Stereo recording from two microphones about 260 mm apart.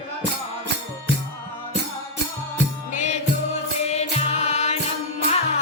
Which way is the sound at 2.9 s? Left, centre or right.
Left.